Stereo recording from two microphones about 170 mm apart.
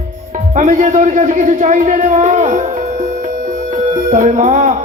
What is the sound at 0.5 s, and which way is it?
A man's voice, 50° right (ahead or behind).